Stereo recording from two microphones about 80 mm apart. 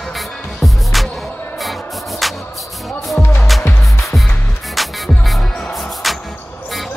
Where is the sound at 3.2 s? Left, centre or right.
Left.